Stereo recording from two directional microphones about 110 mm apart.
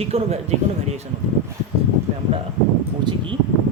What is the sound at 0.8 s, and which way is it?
Speech, 90° right.